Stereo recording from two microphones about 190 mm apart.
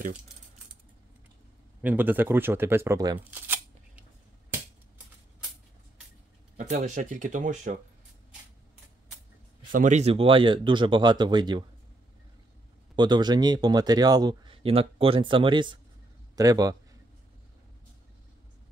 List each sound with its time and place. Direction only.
1.8 s speech: 10° right (ahead or behind)
3.3 s shuffling cards: 10° right (ahead or behind)
6.5 s speech: 40° right (ahead or behind)
9.7 s speech: 40° right (ahead or behind); by 11.6 s 25° right (ahead or behind)
12.9 s speech: 20° right (ahead or behind)